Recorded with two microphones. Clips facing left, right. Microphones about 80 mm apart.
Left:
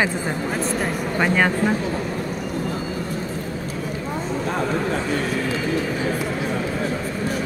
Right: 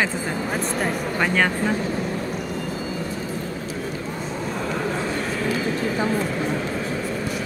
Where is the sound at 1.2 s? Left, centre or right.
Centre.